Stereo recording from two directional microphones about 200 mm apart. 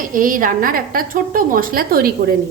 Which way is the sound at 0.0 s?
40° right (ahead or behind).